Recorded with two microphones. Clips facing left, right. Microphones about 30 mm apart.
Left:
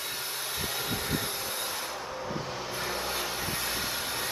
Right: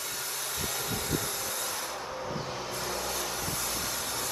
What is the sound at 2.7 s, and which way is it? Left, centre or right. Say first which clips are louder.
Vehicle: left 2 dB; left.